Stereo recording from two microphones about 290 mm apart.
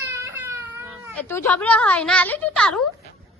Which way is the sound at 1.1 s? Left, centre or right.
Centre.